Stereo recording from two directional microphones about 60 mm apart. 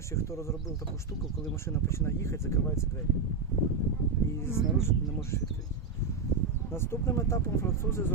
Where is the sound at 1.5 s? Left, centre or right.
Left.